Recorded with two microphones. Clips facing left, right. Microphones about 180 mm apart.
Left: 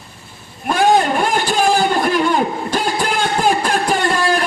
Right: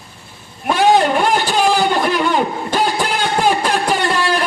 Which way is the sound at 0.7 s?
45° left (ahead or behind).